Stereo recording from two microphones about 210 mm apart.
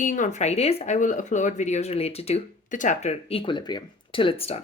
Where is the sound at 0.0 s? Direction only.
35° left (ahead or behind).